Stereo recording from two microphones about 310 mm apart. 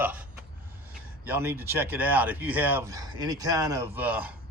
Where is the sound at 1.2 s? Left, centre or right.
Centre.